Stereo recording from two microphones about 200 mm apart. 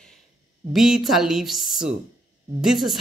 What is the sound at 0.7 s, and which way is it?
Speech, centre (ahead or behind).